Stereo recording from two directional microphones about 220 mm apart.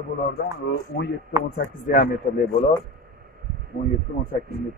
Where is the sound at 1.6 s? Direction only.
40° left (ahead or behind).